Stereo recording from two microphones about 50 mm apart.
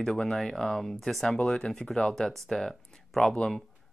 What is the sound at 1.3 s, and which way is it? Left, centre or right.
Speech, centre.